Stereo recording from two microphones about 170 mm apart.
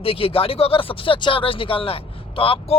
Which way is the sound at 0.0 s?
35° left (ahead or behind).